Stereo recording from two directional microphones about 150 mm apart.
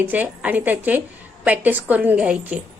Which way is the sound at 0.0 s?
10° right (ahead or behind).